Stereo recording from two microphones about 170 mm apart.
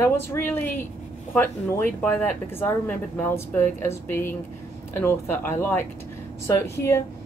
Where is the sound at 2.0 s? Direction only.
10° left (ahead or behind).